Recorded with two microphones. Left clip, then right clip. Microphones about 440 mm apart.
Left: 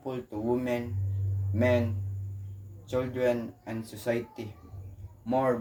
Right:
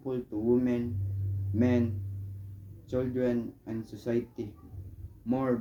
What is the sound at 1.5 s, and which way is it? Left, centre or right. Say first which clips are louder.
Speech: left 3 dB; centre.